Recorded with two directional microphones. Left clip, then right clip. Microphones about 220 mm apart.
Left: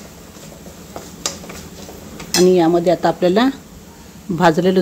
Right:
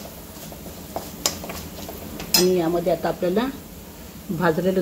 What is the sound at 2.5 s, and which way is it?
Speech, 50° left (ahead or behind).